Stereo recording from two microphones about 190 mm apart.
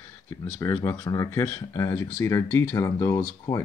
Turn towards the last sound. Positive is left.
turn(degrees=15)  # may be behind; listen again after turning